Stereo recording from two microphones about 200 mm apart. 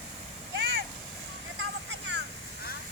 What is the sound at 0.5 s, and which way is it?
Vehicle, 55° right (ahead or behind).